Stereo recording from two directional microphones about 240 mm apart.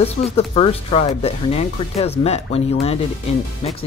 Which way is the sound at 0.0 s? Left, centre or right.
Left.